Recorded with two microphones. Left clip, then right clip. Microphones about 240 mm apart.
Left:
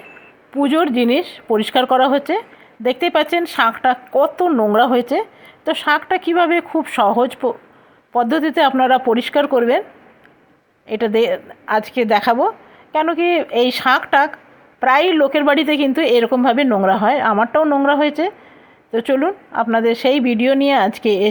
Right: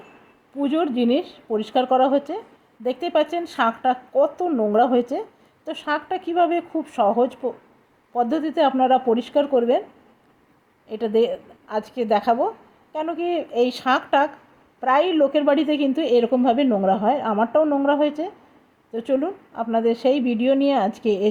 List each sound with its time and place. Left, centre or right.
0.6 s a woman's voice: centre
10.8 s a woman's voice: centre